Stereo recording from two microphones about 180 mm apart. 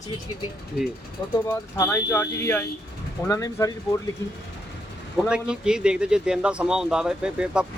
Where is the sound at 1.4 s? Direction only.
15° left (ahead or behind).